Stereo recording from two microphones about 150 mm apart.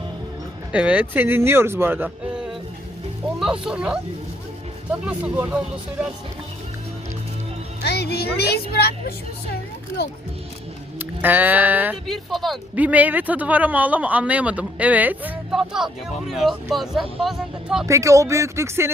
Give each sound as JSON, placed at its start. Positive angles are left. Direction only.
{"t": 0.7, "sound": "speech", "side_deg": -10}
{"t": 7.8, "sound": "speech", "side_deg": 90}
{"t": 10.9, "sound": "speech", "side_deg": -10}
{"t": 12.0, "sound": "speech", "side_deg": 0}
{"t": 12.7, "sound": "speech", "side_deg": -10}
{"t": 17.8, "sound": "speech", "side_deg": -20}